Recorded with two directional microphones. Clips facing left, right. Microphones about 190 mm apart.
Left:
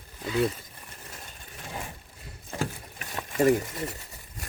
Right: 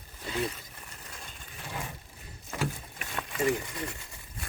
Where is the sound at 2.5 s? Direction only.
35° left (ahead or behind).